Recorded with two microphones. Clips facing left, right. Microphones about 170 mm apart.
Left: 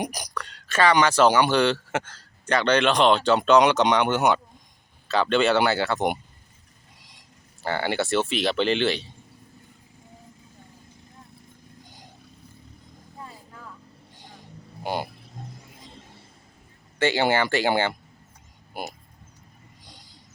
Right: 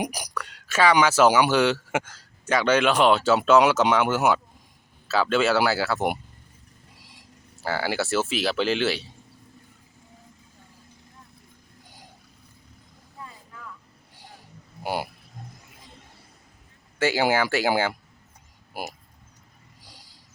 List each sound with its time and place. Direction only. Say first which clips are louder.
0.0 s speech: right 1 dB; 10° right (ahead or behind)
7.6 s speech: left 1 dB; 5° right (ahead or behind)
13.2 s vehicle: right 1 dB; 35° left (ahead or behind)
14.8 s speech: even; 10° right (ahead or behind)
17.0 s speech: even; 5° right (ahead or behind)